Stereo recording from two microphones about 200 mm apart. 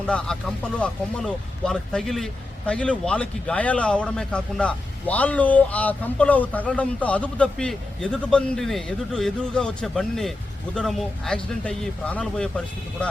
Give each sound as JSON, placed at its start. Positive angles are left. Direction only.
{"t": 0.3, "sound": "speech", "side_deg": 5}